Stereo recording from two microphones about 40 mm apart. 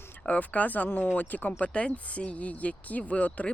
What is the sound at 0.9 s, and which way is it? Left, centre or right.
Speech, left.